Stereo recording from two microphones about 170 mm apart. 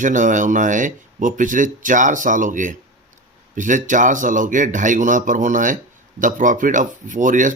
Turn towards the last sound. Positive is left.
turn(degrees=-50)  # may be behind; listen again after turning